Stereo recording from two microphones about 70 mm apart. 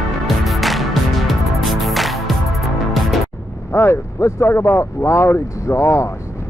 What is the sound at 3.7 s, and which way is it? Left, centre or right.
Speech, left.